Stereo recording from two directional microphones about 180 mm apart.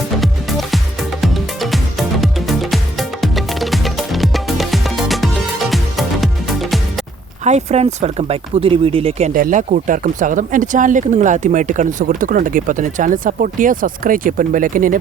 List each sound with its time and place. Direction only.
0.2 s music: centre (ahead or behind)
7.4 s speech: 40° right (ahead or behind)
9.3 s speech: 50° right (ahead or behind)